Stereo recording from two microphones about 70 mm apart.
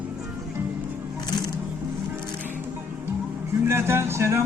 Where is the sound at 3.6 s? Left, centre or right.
Right.